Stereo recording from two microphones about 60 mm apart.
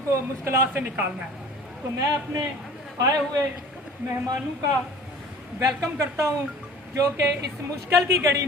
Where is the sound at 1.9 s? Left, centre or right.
Right.